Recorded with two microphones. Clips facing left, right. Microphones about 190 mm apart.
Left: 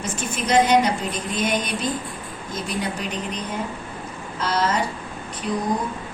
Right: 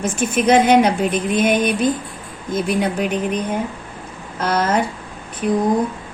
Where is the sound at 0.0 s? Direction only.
55° right (ahead or behind).